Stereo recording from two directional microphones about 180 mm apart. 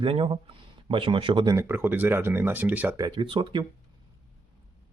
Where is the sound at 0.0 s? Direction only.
30° right (ahead or behind).